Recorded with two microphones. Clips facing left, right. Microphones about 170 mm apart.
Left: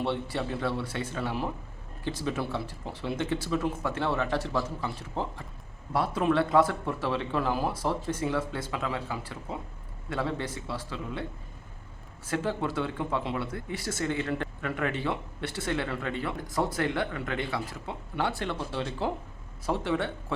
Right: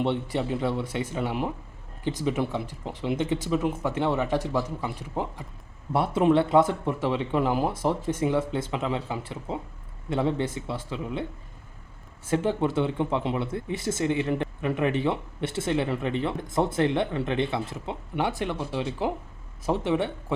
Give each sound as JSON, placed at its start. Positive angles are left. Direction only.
{"t": 0.0, "sound": "speech", "side_deg": -20}